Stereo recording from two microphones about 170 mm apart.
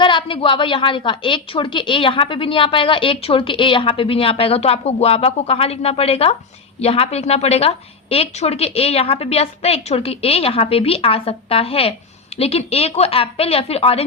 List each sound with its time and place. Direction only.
0.0 s a woman's voice: 30° left (ahead or behind)